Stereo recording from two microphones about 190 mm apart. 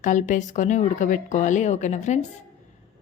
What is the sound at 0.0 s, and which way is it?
A woman's voice, 40° left (ahead or behind).